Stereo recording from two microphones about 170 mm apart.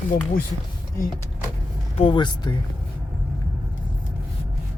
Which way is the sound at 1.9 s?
30° left (ahead or behind).